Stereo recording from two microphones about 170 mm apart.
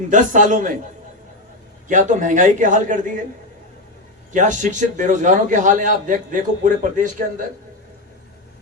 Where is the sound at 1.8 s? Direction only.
50° right (ahead or behind).